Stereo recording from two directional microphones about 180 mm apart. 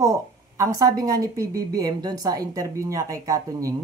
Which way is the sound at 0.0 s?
15° right (ahead or behind).